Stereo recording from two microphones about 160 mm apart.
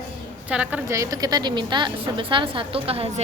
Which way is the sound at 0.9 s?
20° right (ahead or behind).